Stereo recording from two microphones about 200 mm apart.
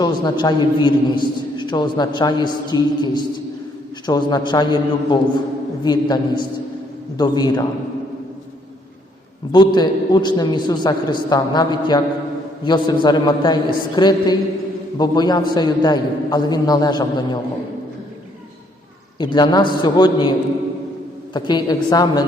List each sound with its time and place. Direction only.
0.0 s a man's voice: 20° left (ahead or behind)
9.5 s a man's voice: 20° left (ahead or behind)
19.2 s a man's voice: 20° left (ahead or behind)
21.3 s a man's voice: 20° left (ahead or behind)